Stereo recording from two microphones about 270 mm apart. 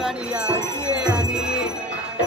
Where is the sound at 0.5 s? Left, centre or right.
Centre.